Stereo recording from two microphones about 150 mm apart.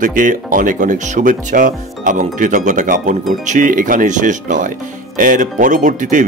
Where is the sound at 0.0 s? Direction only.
60° right (ahead or behind).